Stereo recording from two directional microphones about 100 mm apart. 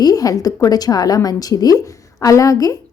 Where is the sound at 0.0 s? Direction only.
40° left (ahead or behind).